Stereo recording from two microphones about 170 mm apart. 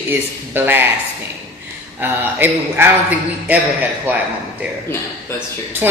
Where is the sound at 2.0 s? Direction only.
10° right (ahead or behind).